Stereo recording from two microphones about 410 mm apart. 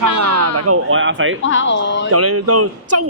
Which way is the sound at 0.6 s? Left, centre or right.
Right.